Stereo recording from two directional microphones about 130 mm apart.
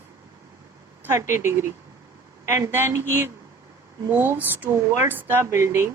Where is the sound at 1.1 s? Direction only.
20° right (ahead or behind).